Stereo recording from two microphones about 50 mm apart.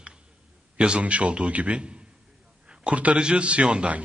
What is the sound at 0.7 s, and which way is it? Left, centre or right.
A man's voice, right.